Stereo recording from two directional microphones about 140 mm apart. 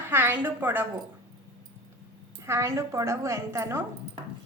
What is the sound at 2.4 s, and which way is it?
A woman's voice, 20° right (ahead or behind).